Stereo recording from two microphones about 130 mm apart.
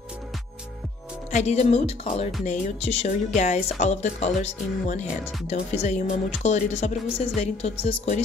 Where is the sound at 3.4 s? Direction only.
65° left (ahead or behind).